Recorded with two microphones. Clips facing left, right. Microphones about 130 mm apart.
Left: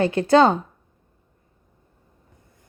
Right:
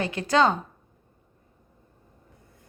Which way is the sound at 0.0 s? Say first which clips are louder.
Left 6 dB; 30° left (ahead or behind).